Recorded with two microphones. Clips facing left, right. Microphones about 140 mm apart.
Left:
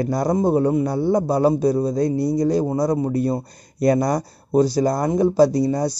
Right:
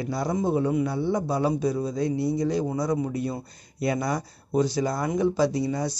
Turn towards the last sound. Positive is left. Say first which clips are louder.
# left 8 dB
turn(degrees=35)  # may be behind; listen again after turning